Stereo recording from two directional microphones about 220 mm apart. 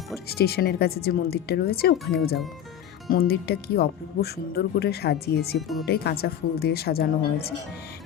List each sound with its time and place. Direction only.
0.3 s speech: 45° left (ahead or behind)
5.5 s speech: centre (ahead or behind)
5.8 s speech: 45° left (ahead or behind)